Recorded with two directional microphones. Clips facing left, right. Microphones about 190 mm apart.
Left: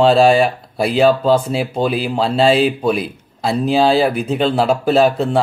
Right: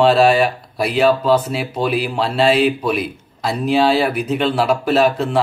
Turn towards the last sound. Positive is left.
turn(degrees=30)  # may be behind; listen again after turning